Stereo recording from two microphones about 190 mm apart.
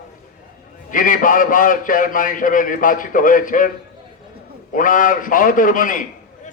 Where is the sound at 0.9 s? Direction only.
45° left (ahead or behind).